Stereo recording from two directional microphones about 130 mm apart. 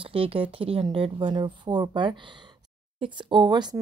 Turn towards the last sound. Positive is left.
turn(degrees=-35)  # may be behind; listen again after turning